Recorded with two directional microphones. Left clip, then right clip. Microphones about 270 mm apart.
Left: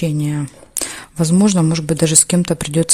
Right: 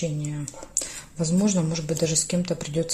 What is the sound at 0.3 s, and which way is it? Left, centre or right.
Speech, left.